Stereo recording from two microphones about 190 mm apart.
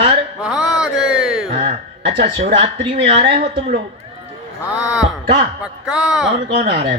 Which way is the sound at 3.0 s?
30° right (ahead or behind).